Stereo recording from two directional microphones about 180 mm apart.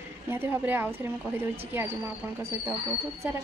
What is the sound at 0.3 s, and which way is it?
Speech, 10° right (ahead or behind).